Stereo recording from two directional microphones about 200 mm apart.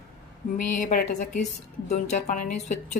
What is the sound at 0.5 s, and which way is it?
A woman's voice, 40° left (ahead or behind).